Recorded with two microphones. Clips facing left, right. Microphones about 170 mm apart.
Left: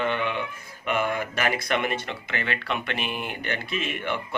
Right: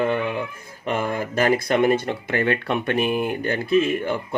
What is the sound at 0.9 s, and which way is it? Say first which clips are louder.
Speech: right 2 dB; 35° right (ahead or behind).